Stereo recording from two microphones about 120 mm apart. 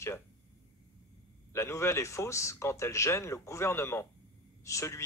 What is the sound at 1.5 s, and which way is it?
A man's voice, 20° left (ahead or behind).